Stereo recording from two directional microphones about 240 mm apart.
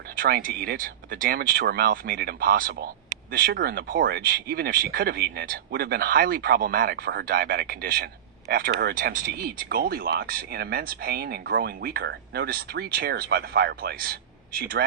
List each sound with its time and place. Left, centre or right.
0.2 s speech: right